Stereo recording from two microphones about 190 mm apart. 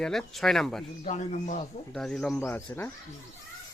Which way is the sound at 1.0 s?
40° left (ahead or behind).